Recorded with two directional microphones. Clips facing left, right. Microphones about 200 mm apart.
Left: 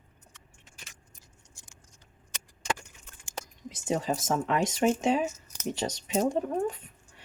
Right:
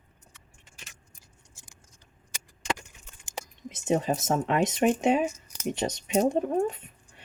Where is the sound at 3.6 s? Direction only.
20° right (ahead or behind).